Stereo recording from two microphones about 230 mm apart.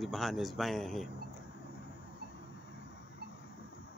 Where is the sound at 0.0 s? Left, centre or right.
Centre.